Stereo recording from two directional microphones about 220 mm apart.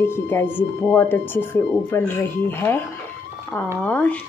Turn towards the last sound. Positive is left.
turn(degrees=5)  # may be behind; listen again after turning